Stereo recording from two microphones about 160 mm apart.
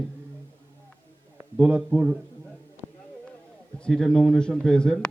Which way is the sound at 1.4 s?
10° right (ahead or behind).